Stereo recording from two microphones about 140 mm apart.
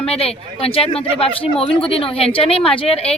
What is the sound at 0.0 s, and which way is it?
A woman's voice, 45° left (ahead or behind).